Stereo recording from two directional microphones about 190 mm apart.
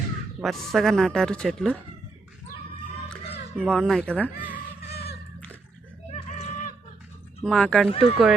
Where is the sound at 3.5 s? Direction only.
5° left (ahead or behind).